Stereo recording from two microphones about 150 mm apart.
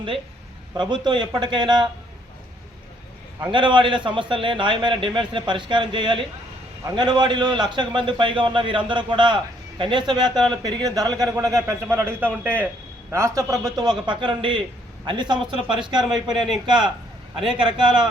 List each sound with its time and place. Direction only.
0.7 s a man's voice: 30° right (ahead or behind)
3.5 s a man's voice: 30° right (ahead or behind)